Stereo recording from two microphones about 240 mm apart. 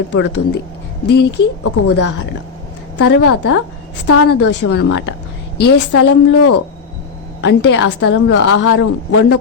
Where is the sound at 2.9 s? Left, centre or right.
Left.